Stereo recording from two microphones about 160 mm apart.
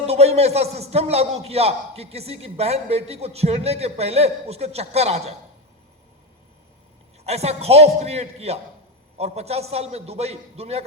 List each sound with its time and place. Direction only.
0.0 s a man's voice: 40° right (ahead or behind)
7.3 s a man's voice: 40° right (ahead or behind)